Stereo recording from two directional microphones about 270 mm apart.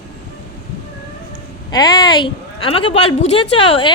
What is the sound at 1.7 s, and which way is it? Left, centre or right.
A woman's voice, centre.